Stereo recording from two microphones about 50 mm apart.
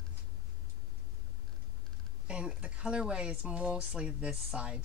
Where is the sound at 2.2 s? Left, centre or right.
Centre.